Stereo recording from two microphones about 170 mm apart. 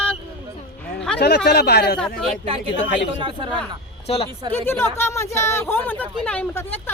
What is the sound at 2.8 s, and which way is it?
Speech, 90° left.